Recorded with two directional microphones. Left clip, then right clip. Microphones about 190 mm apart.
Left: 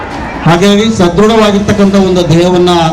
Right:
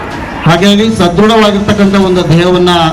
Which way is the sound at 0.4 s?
45° left (ahead or behind).